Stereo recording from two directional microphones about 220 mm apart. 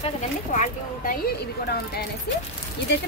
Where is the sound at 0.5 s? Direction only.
35° left (ahead or behind).